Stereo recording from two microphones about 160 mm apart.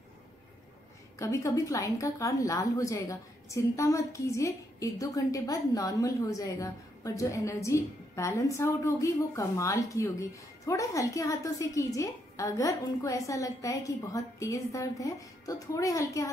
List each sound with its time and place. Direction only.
1.1 s a woman's voice: 20° left (ahead or behind)